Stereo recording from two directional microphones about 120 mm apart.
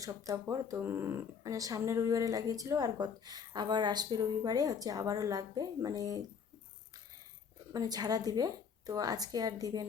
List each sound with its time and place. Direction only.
0.0 s speech: 30° right (ahead or behind)
7.7 s a woman's voice: 30° right (ahead or behind)